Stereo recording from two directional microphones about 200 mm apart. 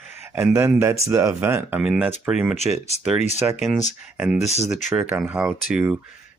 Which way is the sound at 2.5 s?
35° left (ahead or behind).